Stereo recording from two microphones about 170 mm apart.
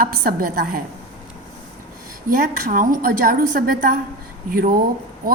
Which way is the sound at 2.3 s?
55° right (ahead or behind).